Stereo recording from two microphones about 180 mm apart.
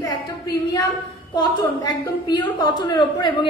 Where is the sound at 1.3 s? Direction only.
25° left (ahead or behind).